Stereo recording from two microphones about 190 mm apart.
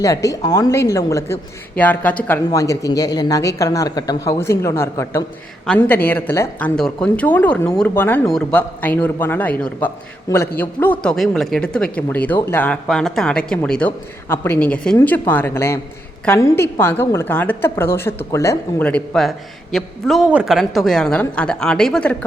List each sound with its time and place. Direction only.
0.0 s a woman's voice: 15° left (ahead or behind)